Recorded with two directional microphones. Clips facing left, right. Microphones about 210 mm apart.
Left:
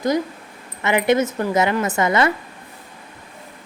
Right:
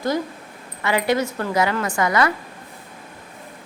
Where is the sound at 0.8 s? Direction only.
20° left (ahead or behind).